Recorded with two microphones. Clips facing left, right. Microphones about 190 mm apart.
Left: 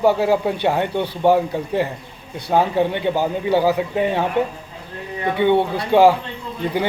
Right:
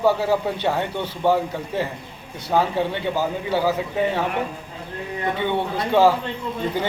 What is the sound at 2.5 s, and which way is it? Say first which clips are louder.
A man's voice: left 3 dB; 15° left (ahead or behind).